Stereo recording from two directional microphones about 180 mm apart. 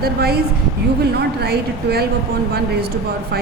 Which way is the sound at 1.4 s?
60° right (ahead or behind).